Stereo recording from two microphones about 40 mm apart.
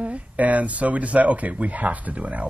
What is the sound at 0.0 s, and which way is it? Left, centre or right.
Speech, right.